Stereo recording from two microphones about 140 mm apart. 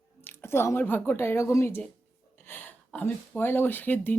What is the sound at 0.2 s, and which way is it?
Speech, 15° left (ahead or behind).